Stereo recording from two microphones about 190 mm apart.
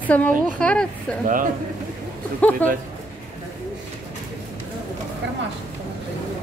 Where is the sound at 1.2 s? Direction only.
45° right (ahead or behind).